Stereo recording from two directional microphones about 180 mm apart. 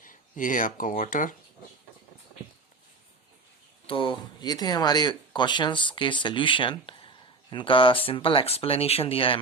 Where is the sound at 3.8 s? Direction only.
30° left (ahead or behind).